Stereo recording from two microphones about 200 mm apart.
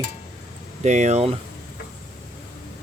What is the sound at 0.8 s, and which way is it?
Speech, 35° right (ahead or behind).